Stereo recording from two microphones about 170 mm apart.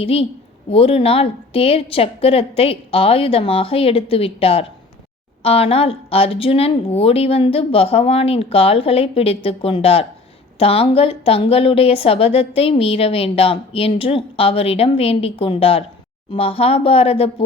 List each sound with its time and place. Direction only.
0.0 s a woman's voice: 35° left (ahead or behind)